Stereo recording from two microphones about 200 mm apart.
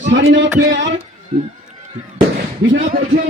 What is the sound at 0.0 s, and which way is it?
Speech, 65° right (ahead or behind).